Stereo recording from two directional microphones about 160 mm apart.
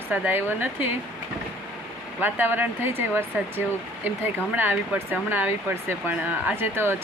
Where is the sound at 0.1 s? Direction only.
15° right (ahead or behind).